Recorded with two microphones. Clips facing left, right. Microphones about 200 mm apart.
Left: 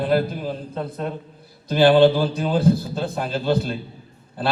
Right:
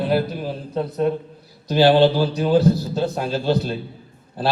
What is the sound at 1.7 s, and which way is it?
A man's voice, 55° left (ahead or behind).